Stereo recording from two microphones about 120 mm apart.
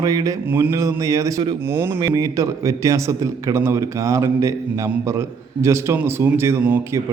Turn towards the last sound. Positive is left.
turn(degrees=-20)  # may be behind; listen again after turning